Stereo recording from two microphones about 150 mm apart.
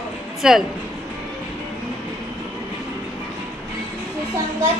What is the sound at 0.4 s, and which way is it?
Speech, 5° right (ahead or behind).